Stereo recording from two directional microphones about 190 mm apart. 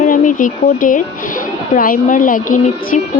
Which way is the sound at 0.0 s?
45° left (ahead or behind).